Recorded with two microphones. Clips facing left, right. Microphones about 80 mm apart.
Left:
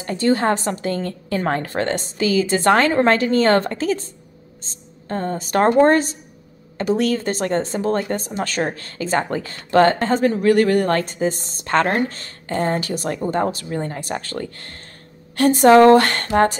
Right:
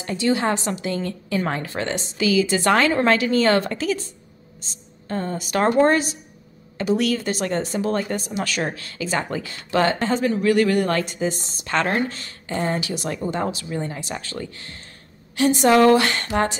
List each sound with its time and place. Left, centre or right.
0.0 s a woman's voice: left
15.7 s speech: left
16.0 s speech: left